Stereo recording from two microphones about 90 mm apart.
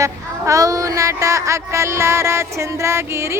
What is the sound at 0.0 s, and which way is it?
Speech, 40° right (ahead or behind).